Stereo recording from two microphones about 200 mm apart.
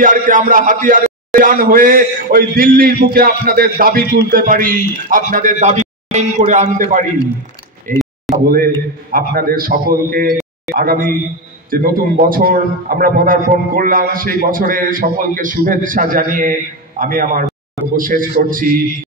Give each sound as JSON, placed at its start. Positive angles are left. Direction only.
{"t": 0.0, "sound": "speech", "side_deg": -40}